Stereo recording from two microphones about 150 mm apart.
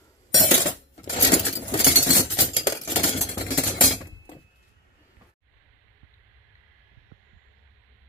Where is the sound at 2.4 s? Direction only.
35° left (ahead or behind).